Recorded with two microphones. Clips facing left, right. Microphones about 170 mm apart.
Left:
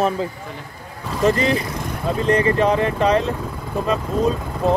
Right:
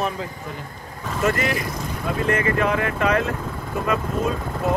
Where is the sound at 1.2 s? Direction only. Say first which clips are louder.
Left 5 dB; 30° left (ahead or behind).